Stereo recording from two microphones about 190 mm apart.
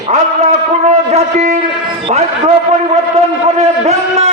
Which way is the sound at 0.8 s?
35° right (ahead or behind).